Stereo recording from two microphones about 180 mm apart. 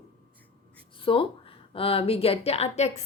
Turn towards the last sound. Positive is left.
turn(degrees=35)  # may be behind; listen again after turning